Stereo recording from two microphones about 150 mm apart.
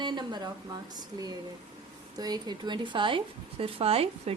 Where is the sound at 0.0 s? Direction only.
30° right (ahead or behind).